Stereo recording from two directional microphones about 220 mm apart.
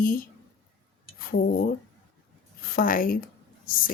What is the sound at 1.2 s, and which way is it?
A woman's voice, 40° left (ahead or behind).